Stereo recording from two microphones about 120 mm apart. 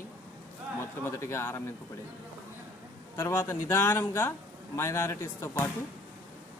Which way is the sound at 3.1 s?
25° left (ahead or behind).